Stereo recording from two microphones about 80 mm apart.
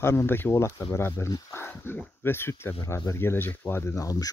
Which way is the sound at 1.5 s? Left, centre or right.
Left.